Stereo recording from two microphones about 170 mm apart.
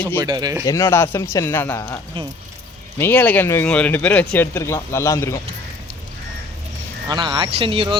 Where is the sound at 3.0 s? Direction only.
10° left (ahead or behind).